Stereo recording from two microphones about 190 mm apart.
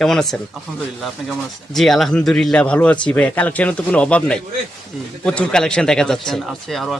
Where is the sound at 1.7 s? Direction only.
Centre (ahead or behind).